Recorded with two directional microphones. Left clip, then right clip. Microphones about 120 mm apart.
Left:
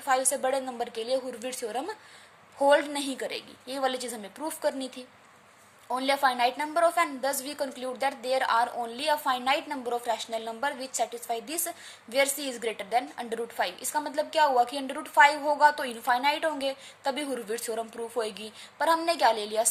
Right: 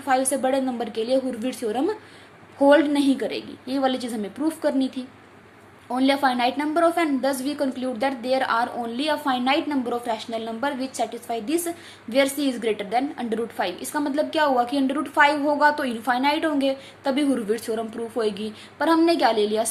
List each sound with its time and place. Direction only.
0.0 s a woman's voice: 40° left (ahead or behind)